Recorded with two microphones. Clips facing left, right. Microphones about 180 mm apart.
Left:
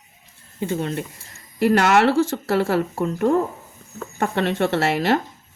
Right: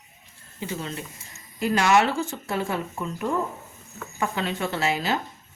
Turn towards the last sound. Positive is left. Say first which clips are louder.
# left 6 dB
turn(degrees=75)  # may be behind; listen again after turning